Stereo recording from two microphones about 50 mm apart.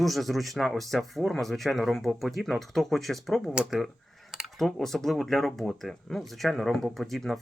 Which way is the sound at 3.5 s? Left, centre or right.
Centre.